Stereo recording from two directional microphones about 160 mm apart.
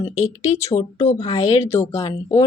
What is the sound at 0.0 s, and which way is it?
A woman's voice, 45° left (ahead or behind).